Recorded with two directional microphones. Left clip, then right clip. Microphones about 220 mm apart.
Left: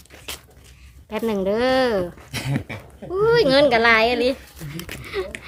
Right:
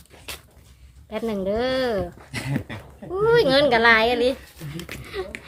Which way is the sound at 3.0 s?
15° left (ahead or behind).